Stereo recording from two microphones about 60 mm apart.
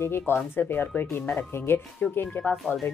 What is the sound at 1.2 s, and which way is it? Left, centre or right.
Speech, left.